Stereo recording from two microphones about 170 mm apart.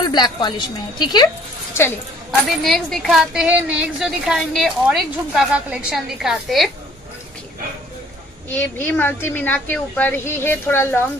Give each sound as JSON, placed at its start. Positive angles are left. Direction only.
{"t": 0.1, "sound": "speech", "side_deg": 25}
{"t": 2.4, "sound": "a woman's voice", "side_deg": 0}
{"t": 8.5, "sound": "a woman's voice", "side_deg": 10}